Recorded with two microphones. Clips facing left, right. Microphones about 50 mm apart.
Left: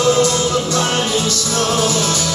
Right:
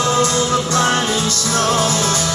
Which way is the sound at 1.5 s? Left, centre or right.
Right.